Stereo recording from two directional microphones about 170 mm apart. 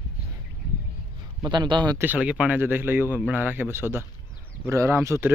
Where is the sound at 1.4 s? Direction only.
25° right (ahead or behind).